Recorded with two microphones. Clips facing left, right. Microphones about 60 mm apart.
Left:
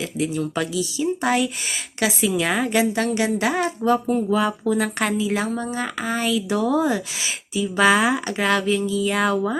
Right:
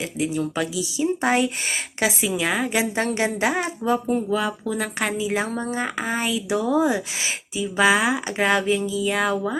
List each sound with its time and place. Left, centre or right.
0.2 s speech: centre
0.9 s speech: right
2.2 s speech: centre
3.1 s speech: right
3.5 s speech: centre
4.3 s speech: centre
5.1 s speech: centre
7.8 s speech: centre
8.3 s speech: centre